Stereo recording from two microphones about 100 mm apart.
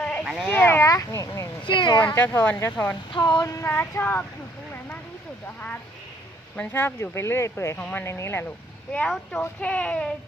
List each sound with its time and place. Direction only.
0.0 s a sound: 10° left (ahead or behind)
0.4 s speech: 20° left (ahead or behind)
0.9 s speech: 35° left (ahead or behind)
1.6 s speech: 55° left (ahead or behind)
2.1 s speech: 20° left (ahead or behind)
3.1 s speech: 45° left (ahead or behind)
3.4 s speech: 30° left (ahead or behind)
6.7 s speech: 25° left (ahead or behind)
7.8 s speech: 15° left (ahead or behind)
8.0 s speech: 25° left (ahead or behind)
9.4 s speech: 15° left (ahead or behind)